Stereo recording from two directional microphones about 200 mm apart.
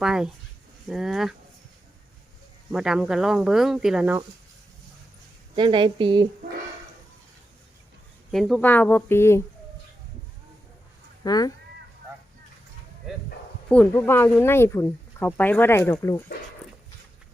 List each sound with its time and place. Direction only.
0.0 s speech: 5° right (ahead or behind)
2.7 s speech: 5° right (ahead or behind)
5.5 s a woman's voice: 25° right (ahead or behind)
8.3 s speech: centre (ahead or behind)
11.2 s speech: 20° left (ahead or behind)
13.7 s speech: 10° left (ahead or behind)